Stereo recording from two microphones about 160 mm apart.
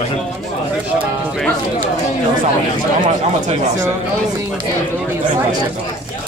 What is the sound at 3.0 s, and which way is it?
Speech, 50° right (ahead or behind).